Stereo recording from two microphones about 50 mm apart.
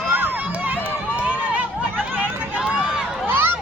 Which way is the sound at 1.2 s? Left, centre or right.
Right.